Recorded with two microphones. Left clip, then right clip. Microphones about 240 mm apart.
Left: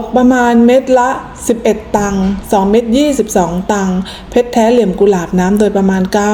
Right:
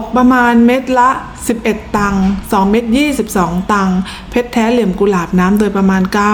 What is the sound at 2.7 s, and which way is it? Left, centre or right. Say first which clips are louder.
A woman's voice: left 3 dB; centre.